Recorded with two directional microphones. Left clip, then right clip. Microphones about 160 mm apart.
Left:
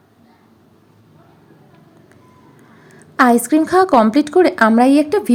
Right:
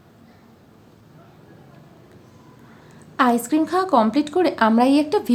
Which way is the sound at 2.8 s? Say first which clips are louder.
Left 6 dB; 30° left (ahead or behind).